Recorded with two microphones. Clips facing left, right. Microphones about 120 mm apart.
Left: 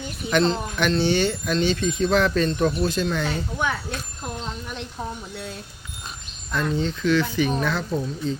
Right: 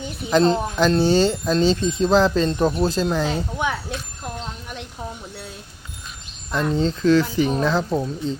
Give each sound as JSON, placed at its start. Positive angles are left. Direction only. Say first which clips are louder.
{"t": 0.4, "sound": "speech", "louder": "right 5 dB", "side_deg": -40}
{"t": 6.5, "sound": "speech", "louder": "right 3 dB", "side_deg": -30}